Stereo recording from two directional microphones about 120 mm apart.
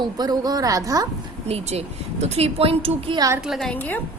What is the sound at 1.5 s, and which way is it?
A woman's voice, 65° right (ahead or behind).